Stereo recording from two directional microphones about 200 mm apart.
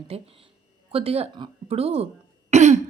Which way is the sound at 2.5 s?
35° right (ahead or behind).